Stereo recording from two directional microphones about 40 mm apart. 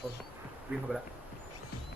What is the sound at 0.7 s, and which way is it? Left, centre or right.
Speech, right.